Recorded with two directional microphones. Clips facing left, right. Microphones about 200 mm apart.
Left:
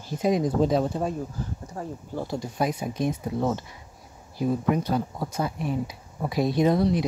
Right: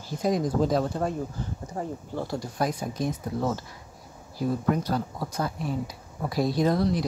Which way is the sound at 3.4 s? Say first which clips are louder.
Left 2 dB; 20° left (ahead or behind).